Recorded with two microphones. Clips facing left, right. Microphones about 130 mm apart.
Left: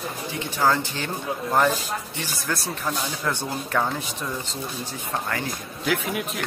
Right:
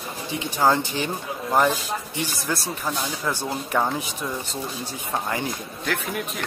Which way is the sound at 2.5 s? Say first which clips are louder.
Left 2 dB; 10° right (ahead or behind).